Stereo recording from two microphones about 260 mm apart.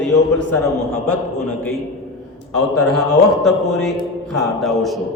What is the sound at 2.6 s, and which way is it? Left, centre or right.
A man's voice, centre.